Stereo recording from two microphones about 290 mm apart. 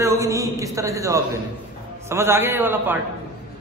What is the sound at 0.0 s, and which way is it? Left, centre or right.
A man's voice, centre.